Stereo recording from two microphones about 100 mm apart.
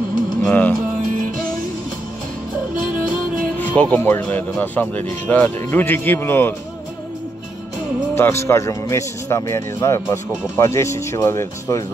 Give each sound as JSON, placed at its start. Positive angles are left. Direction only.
{"t": 0.5, "sound": "music", "side_deg": 15}
{"t": 3.5, "sound": "speech", "side_deg": 15}
{"t": 8.1, "sound": "speech", "side_deg": 25}